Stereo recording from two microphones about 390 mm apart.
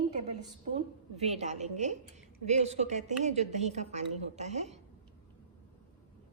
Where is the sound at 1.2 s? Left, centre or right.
Centre.